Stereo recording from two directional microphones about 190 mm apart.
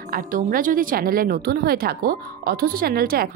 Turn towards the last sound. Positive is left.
turn(degrees=-55)  # may be behind; listen again after turning